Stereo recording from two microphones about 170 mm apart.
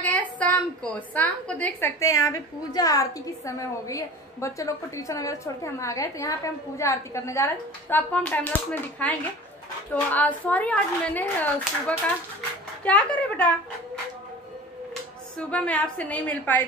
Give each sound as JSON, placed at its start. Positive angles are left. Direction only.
{"t": 0.0, "sound": "a woman's voice", "side_deg": 10}
{"t": 12.8, "sound": "a woman's voice", "side_deg": 10}
{"t": 15.3, "sound": "a woman's voice", "side_deg": 10}